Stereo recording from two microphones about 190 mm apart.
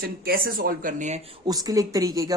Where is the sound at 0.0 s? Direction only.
50° right (ahead or behind).